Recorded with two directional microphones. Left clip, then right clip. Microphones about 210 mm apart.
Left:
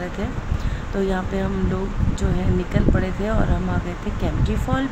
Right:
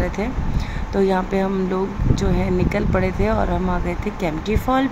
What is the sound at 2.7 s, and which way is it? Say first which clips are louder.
Speech: right 3 dB; 10° right (ahead or behind).